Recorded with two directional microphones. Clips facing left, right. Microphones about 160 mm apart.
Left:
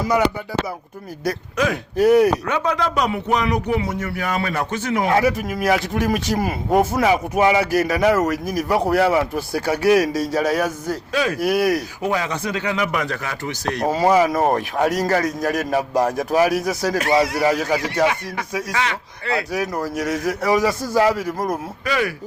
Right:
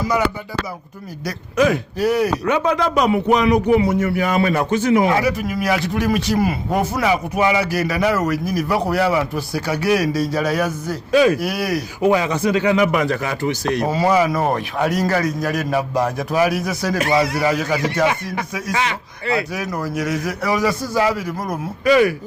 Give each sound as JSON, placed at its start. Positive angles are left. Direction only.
{"t": 1.5, "sound": "speech", "side_deg": -5}
{"t": 2.0, "sound": "speech", "side_deg": 50}
{"t": 2.5, "sound": "speech", "side_deg": -10}
{"t": 5.0, "sound": "speech", "side_deg": 50}
{"t": 11.1, "sound": "speech", "side_deg": -15}
{"t": 11.3, "sound": "speech", "side_deg": 50}
{"t": 12.0, "sound": "speech", "side_deg": -15}
{"t": 13.8, "sound": "speech", "side_deg": 45}
{"t": 18.7, "sound": "speech", "side_deg": -15}
{"t": 19.5, "sound": "speech", "side_deg": 40}
{"t": 21.8, "sound": "speech", "side_deg": -15}